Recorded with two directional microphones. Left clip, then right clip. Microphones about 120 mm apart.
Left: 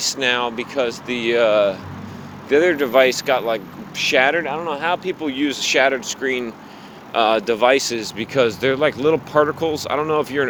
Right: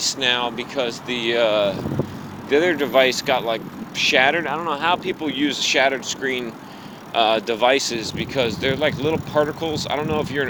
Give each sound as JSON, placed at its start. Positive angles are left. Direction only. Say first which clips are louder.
{"t": 0.0, "sound": "speech", "louder": "left 1 dB", "side_deg": 90}
{"t": 4.4, "sound": "speech", "louder": "left 1 dB", "side_deg": 40}